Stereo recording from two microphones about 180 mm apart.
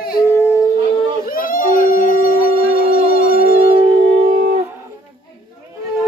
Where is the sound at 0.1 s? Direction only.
15° left (ahead or behind).